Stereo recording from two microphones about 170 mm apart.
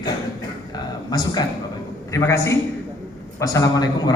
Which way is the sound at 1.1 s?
25° left (ahead or behind).